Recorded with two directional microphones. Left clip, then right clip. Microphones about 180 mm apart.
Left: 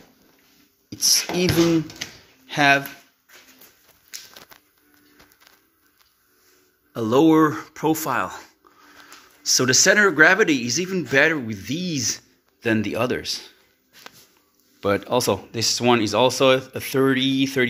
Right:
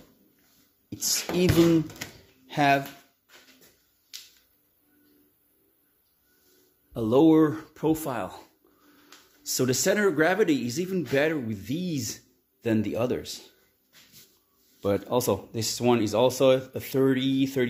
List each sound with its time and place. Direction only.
1.1 s speech: 15° right (ahead or behind)
2.1 s a sound: 10° right (ahead or behind)
6.9 s speech: 5° right (ahead or behind)
9.5 s speech: 5° right (ahead or behind)
14.8 s speech: 5° right (ahead or behind)